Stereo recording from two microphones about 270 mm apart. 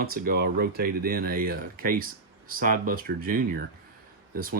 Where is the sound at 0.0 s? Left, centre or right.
Right.